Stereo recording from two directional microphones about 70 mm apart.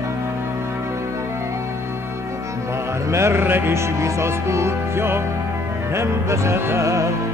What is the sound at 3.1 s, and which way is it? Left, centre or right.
Music, right.